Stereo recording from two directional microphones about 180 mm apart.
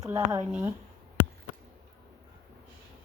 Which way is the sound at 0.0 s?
20° right (ahead or behind).